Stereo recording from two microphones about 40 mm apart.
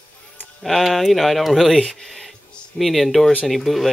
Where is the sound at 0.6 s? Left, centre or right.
Centre.